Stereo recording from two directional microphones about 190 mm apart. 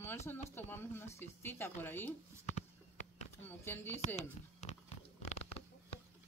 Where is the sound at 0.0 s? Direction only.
15° left (ahead or behind).